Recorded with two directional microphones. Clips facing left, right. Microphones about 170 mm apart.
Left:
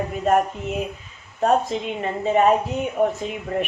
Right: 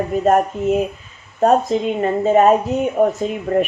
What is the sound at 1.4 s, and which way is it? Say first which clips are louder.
Speech: right 5 dB; 40° right (ahead or behind).